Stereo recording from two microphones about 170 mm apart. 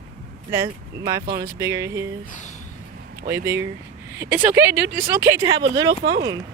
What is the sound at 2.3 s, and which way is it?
Speech, 45° left (ahead or behind).